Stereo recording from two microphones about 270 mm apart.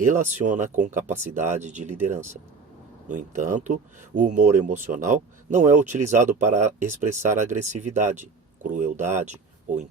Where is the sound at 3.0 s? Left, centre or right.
Right.